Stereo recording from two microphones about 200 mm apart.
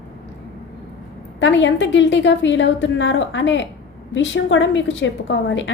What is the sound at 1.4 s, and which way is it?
A woman's voice, 65° left (ahead or behind).